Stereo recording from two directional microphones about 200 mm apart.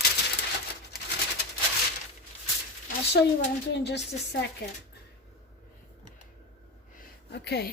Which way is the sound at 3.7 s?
55° left (ahead or behind).